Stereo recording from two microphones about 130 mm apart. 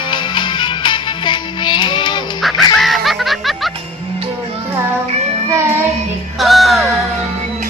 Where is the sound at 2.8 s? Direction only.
Centre (ahead or behind).